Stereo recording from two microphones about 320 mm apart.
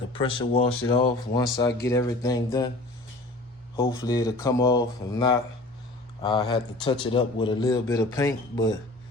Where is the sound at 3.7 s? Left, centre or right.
Centre.